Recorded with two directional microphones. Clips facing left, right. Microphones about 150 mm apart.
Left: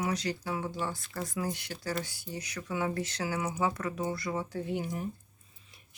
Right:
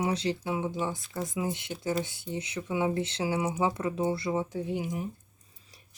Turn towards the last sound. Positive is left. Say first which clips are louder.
# right 2 dB
turn(degrees=-10)  # may be behind; listen again after turning